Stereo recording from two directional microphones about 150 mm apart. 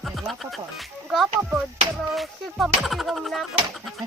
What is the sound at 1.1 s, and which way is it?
Speech, 5° right (ahead or behind).